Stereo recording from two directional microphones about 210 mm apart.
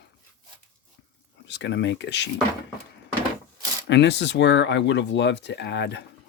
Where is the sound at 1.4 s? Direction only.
55° left (ahead or behind).